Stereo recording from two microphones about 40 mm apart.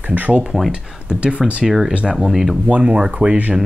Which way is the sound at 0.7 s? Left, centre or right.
Right.